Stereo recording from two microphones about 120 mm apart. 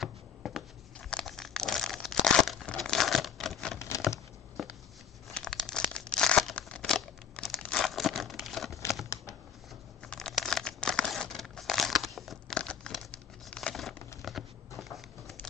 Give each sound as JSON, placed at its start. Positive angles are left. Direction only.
{"t": 0.0, "sound": "crushing", "side_deg": 0}
{"t": 2.2, "sound": "tearing", "side_deg": 5}
{"t": 4.6, "sound": "a sound", "side_deg": 0}
{"t": 5.3, "sound": "crumpling", "side_deg": 5}
{"t": 10.0, "sound": "crumpling", "side_deg": 5}
{"t": 14.2, "sound": "a sound", "side_deg": 0}